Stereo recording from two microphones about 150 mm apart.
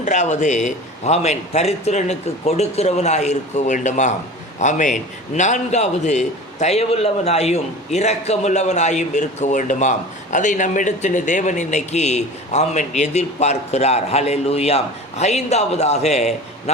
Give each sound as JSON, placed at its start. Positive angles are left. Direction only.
{"t": 0.0, "sound": "a man's voice", "side_deg": 55}